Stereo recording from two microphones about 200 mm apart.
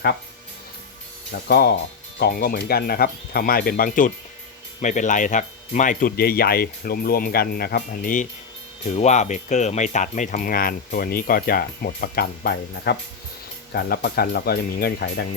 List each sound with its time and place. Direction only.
1.5 s speech: 50° left (ahead or behind)